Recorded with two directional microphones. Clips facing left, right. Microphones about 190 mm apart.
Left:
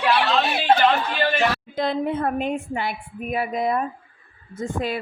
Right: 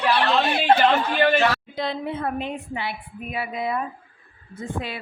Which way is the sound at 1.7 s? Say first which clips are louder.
Left 4 dB; 45° left (ahead or behind).